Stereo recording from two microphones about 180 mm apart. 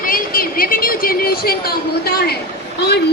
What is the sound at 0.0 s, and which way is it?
A woman's voice, 50° left (ahead or behind).